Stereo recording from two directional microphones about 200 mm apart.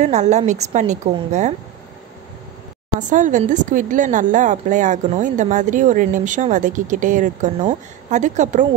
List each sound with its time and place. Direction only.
0.0 s a woman's voice: 35° right (ahead or behind)
3.0 s a woman's voice: 40° right (ahead or behind)